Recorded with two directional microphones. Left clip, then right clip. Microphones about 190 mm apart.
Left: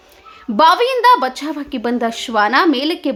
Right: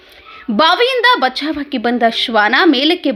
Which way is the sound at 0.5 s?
10° right (ahead or behind).